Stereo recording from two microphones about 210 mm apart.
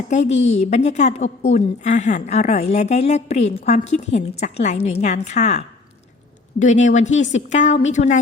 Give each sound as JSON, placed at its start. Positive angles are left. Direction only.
{"t": 0.1, "sound": "a woman's voice", "side_deg": 35}